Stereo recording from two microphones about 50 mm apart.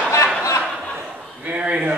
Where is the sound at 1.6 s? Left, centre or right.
Right.